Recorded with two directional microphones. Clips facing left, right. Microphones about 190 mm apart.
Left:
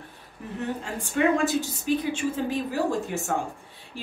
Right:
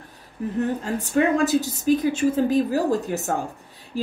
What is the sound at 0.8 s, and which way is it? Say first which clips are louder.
A woman's voice: even; 40° right (ahead or behind).